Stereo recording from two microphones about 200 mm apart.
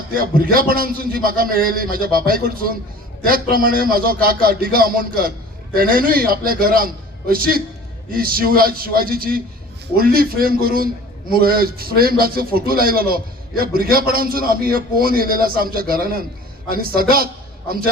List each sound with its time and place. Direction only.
0.1 s a man's voice: 45° right (ahead or behind)